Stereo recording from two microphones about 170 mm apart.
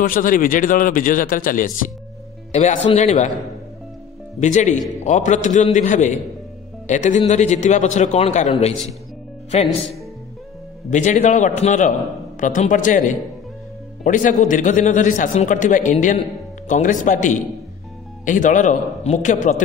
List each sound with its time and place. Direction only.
0.0 s a man's voice: 55° left (ahead or behind)
2.5 s speech: 45° left (ahead or behind)
4.4 s a man's voice: 45° left (ahead or behind)
10.9 s a man's voice: 45° left (ahead or behind)